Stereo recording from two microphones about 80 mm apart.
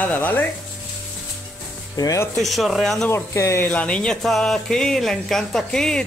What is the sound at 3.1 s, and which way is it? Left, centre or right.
Speech, left.